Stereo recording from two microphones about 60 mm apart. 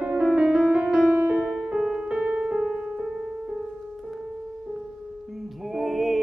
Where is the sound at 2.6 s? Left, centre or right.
Centre.